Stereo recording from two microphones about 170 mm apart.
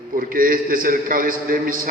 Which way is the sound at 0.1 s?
55° right (ahead or behind).